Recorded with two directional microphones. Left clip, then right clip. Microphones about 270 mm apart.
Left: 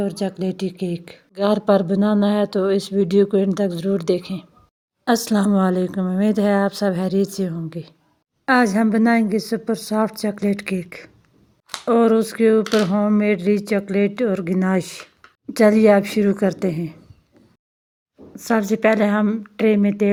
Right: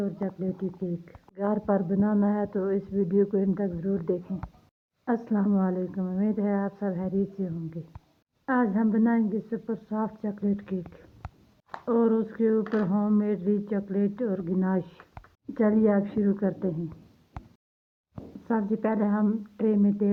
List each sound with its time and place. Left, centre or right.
0.0 s speech: left
11.9 s a woman's voice: left
18.4 s a woman's voice: left
19.1 s speech: left
19.5 s a woman's voice: left